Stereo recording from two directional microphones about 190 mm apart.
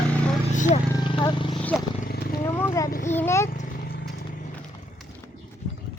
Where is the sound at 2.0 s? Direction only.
50° left (ahead or behind).